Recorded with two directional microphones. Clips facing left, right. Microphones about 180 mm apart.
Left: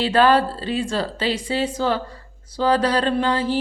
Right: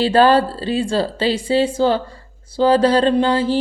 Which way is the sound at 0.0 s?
30° right (ahead or behind).